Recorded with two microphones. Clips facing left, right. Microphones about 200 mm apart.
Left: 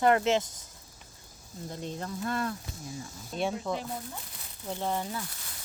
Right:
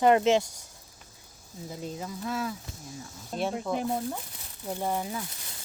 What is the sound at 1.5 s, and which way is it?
Speech, 5° right (ahead or behind).